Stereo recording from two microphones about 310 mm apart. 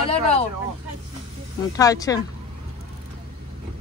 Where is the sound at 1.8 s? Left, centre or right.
Centre.